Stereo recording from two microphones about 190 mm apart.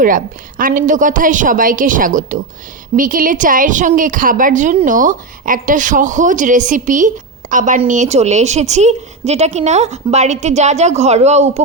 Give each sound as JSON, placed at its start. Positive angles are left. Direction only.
{"t": 0.0, "sound": "a woman's voice", "side_deg": -45}